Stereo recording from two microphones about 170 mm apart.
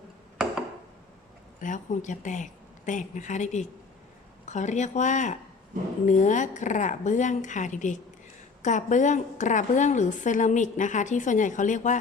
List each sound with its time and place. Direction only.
1.6 s a woman's voice: 45° left (ahead or behind)